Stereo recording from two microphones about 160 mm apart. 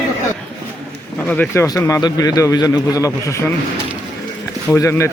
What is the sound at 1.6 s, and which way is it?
A man's voice, 20° left (ahead or behind).